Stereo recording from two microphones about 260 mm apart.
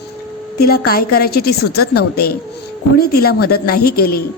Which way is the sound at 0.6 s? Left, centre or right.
Left.